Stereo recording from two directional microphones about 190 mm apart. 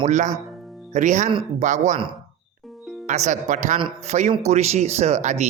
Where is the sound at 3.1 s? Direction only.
40° right (ahead or behind).